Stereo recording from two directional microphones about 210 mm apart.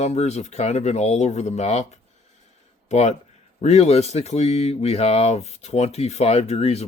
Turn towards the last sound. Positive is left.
turn(degrees=30)  # may be behind; listen again after turning